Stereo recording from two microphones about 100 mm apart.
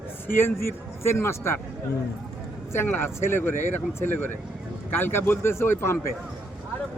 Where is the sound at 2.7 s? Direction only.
20° left (ahead or behind).